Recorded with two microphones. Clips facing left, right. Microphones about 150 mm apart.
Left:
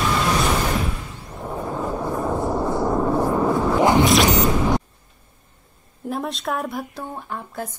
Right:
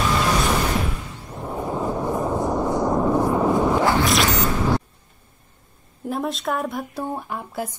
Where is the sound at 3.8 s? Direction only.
20° left (ahead or behind).